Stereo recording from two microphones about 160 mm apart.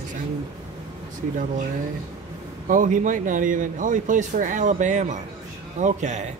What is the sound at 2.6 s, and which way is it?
A man's voice, 55° right (ahead or behind).